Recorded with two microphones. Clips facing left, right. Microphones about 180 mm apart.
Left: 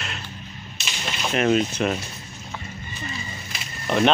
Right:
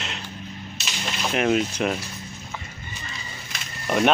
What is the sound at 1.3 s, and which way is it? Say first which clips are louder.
Speech: left 2 dB; 10° right (ahead or behind).